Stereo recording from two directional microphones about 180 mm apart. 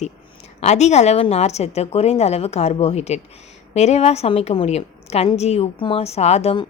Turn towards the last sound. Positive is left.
turn(degrees=30)  # may be behind; listen again after turning